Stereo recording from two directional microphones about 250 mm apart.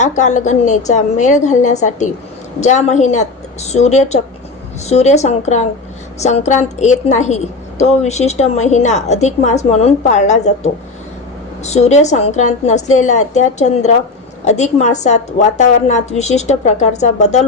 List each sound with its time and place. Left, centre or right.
0.0 s a woman's voice: left